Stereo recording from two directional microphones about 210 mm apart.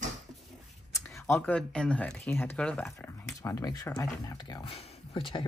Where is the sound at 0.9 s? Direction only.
15° left (ahead or behind).